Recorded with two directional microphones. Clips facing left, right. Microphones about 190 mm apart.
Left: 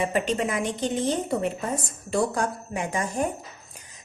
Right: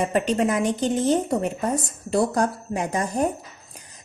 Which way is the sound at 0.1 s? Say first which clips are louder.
Right 4 dB; 40° right (ahead or behind).